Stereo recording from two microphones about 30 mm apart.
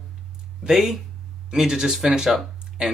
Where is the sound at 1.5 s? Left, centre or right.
Right.